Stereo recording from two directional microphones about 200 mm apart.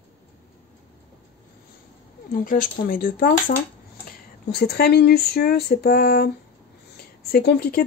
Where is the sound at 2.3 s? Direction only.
45° left (ahead or behind).